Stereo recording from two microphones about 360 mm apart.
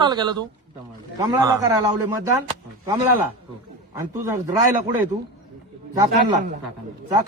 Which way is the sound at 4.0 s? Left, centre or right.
Centre.